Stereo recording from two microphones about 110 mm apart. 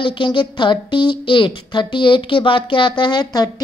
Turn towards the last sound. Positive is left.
turn(degrees=40)  # may be behind; listen again after turning